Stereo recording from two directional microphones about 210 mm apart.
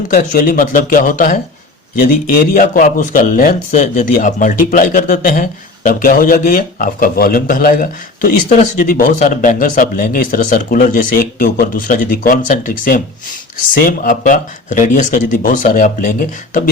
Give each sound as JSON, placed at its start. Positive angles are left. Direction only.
{"t": 0.1, "sound": "a man's voice", "side_deg": 40}